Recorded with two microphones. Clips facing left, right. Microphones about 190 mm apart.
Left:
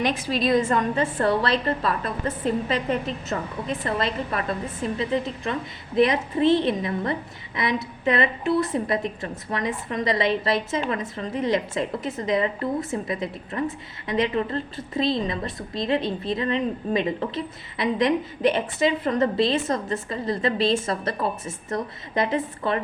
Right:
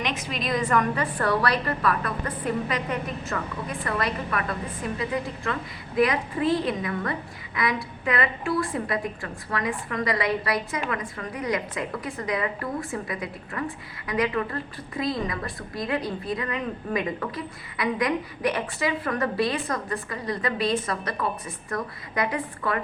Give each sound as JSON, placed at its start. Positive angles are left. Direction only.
{"t": 0.0, "sound": "a woman's voice", "side_deg": 30}